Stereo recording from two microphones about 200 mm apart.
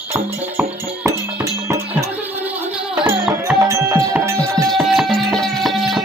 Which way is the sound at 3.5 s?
15° right (ahead or behind).